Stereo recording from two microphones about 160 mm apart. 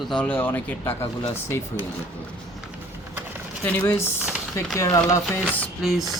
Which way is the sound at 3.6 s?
15° left (ahead or behind).